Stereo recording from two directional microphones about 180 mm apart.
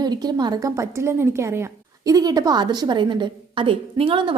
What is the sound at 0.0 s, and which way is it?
A woman's voice, 20° right (ahead or behind).